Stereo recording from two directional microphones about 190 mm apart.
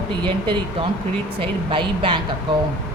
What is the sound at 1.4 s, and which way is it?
Speech, 25° right (ahead or behind).